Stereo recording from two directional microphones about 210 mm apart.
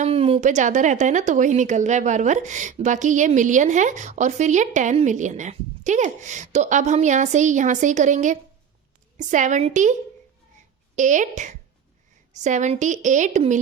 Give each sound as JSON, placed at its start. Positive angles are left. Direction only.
{"t": 0.0, "sound": "a woman's voice", "side_deg": -30}